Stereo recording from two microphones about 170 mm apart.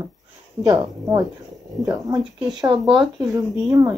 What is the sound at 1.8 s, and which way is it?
Speech, 20° right (ahead or behind).